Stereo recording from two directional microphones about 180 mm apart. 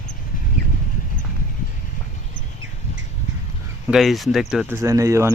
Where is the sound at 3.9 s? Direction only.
Centre (ahead or behind).